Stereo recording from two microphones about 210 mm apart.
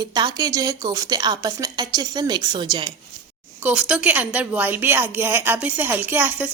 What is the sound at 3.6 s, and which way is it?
A woman's voice, 5° right (ahead or behind).